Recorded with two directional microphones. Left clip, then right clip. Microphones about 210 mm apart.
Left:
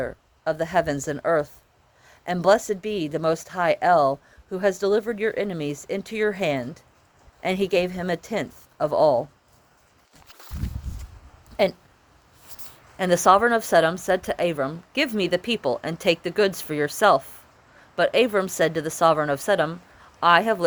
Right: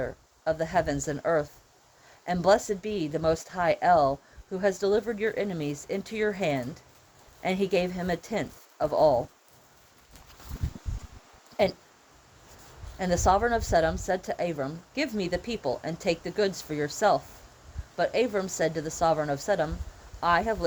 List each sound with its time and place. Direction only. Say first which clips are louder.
0.0 s speech: left 3 dB; 35° left (ahead or behind)
11.5 s speech: left 4 dB; 35° left (ahead or behind)
13.0 s speech: left 7 dB; 35° left (ahead or behind)